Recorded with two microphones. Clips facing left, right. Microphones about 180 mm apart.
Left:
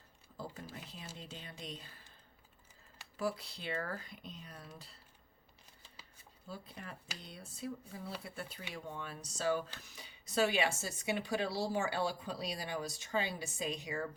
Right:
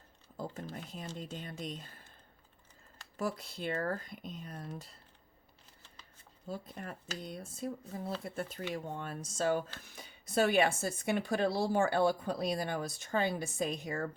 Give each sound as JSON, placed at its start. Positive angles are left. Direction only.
{"t": 0.3, "sound": "speech", "side_deg": -50}
{"t": 3.2, "sound": "speech", "side_deg": -45}
{"t": 6.5, "sound": "speech", "side_deg": -45}